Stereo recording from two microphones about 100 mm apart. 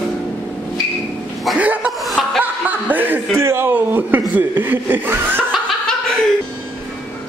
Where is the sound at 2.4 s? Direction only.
20° right (ahead or behind).